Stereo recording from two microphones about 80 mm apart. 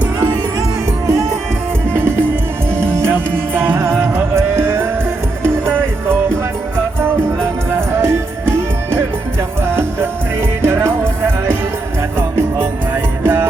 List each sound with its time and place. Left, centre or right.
3.0 s music: right
7.8 s music: right
10.6 s music: right
12.4 s music: right